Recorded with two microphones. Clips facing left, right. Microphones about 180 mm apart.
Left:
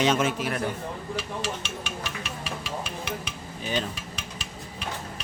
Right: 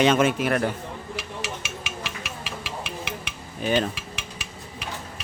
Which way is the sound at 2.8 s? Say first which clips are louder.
Even; 65° right (ahead or behind).